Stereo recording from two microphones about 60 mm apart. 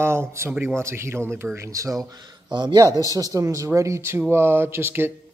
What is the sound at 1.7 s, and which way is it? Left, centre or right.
Speech, right.